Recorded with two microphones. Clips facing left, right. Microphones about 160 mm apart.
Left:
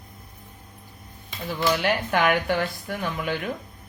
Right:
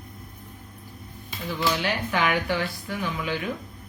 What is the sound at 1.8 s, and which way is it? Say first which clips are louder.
Speech: left 3 dB; 50° left (ahead or behind).